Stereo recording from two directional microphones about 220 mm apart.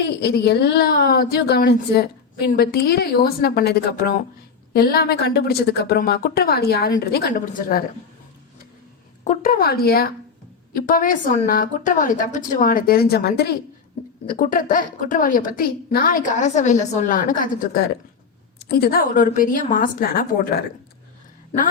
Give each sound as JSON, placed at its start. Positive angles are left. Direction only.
{"t": 0.0, "sound": "speech", "side_deg": 45}
{"t": 9.2, "sound": "a woman's voice", "side_deg": 35}
{"t": 14.0, "sound": "a woman's voice", "side_deg": 30}
{"t": 14.3, "sound": "a woman's voice", "side_deg": 40}
{"t": 21.5, "sound": "a woman's voice", "side_deg": 25}